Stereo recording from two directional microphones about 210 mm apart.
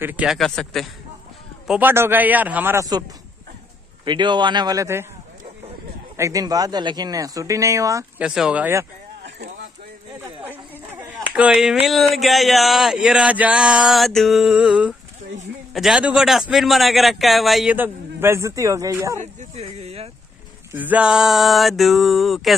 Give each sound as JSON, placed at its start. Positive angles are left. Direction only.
{"t": 0.0, "sound": "a man's voice", "side_deg": -5}
{"t": 1.7, "sound": "speech", "side_deg": -10}
{"t": 6.1, "sound": "speech", "side_deg": -15}
{"t": 8.3, "sound": "a man's voice", "side_deg": -5}
{"t": 9.2, "sound": "a sound", "side_deg": -55}
{"t": 10.2, "sound": "a sound", "side_deg": -10}
{"t": 11.3, "sound": "a man's voice", "side_deg": -5}
{"t": 19.1, "sound": "speech", "side_deg": -30}
{"t": 20.7, "sound": "a man's voice", "side_deg": -10}